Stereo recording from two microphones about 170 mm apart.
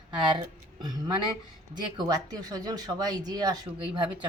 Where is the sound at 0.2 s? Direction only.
30° right (ahead or behind).